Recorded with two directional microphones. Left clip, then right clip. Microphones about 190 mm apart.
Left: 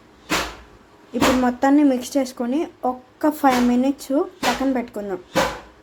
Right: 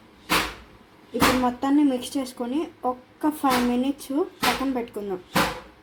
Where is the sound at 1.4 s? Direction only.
25° left (ahead or behind).